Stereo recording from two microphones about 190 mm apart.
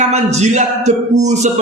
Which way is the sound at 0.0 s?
35° right (ahead or behind).